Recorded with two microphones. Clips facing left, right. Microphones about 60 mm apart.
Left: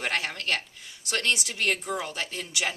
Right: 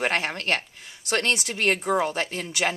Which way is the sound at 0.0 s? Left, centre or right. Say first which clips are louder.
Right 4 dB; right.